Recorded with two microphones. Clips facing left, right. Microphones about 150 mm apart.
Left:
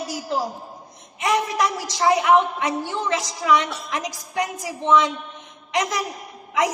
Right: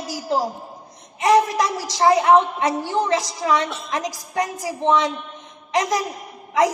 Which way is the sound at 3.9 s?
40° right (ahead or behind).